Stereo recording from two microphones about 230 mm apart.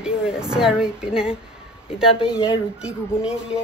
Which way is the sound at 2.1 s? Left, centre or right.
Centre.